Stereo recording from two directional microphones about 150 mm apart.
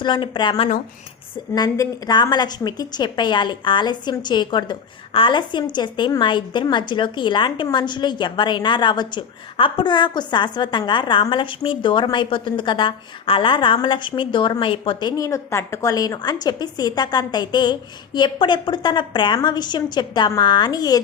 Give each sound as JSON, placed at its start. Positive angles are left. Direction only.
{"t": 0.0, "sound": "a woman's voice", "side_deg": 30}
{"t": 15.1, "sound": "a woman's voice", "side_deg": 20}